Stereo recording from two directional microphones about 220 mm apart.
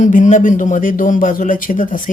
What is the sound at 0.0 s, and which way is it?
A woman's voice, 35° left (ahead or behind).